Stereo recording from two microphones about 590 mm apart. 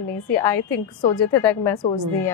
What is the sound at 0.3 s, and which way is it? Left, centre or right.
A woman's voice, centre.